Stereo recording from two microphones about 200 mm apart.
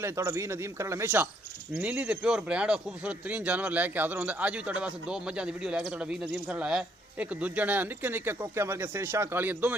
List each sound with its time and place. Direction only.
0.0 s speech: 15° right (ahead or behind)